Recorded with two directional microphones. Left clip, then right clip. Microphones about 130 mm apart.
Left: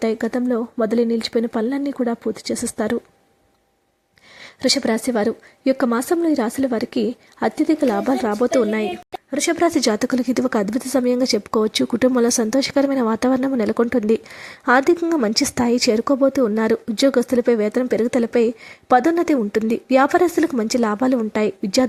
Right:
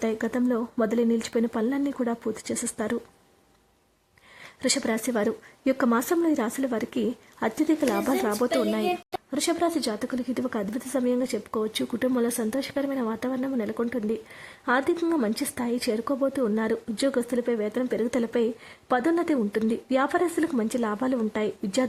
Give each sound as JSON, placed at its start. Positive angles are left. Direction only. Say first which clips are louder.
{"t": 0.0, "sound": "a woman's voice", "louder": "left 6 dB", "side_deg": 25}
{"t": 4.4, "sound": "a woman's voice", "louder": "left 8 dB", "side_deg": 30}
{"t": 8.5, "sound": "speech", "louder": "left 7 dB", "side_deg": 50}
{"t": 9.3, "sound": "speech", "louder": "left 7 dB", "side_deg": 40}